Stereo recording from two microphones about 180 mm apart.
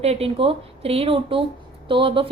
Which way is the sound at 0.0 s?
35° right (ahead or behind).